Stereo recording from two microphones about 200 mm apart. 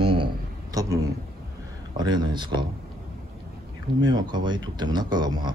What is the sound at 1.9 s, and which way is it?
Speech, 20° right (ahead or behind).